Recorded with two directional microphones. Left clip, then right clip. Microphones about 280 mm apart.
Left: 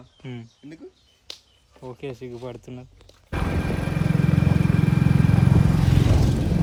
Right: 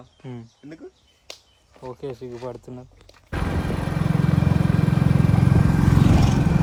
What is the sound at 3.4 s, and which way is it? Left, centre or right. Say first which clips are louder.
Vehicle: even; centre.